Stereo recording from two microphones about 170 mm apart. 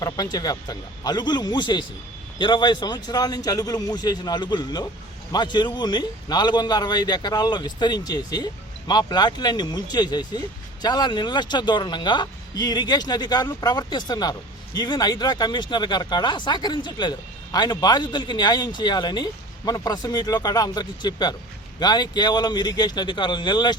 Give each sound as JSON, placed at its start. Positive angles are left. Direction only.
{"t": 0.0, "sound": "speech", "side_deg": 20}